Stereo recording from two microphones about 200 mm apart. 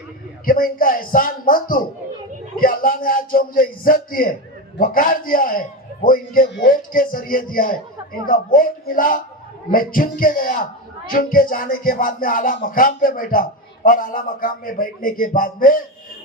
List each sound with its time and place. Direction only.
0.4 s a man's voice: 45° left (ahead or behind)